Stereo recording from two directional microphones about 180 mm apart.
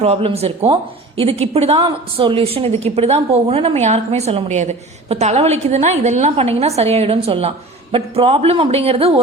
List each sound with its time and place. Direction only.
0.0 s a woman's voice: 30° right (ahead or behind)